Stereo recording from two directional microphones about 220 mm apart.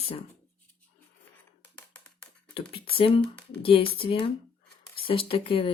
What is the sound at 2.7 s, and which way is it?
Speech, 25° left (ahead or behind).